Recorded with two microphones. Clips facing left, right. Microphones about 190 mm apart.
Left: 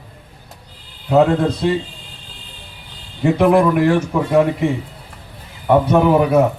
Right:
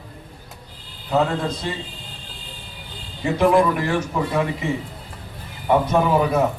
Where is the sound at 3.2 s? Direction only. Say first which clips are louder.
Left 4 dB; 60° left (ahead or behind).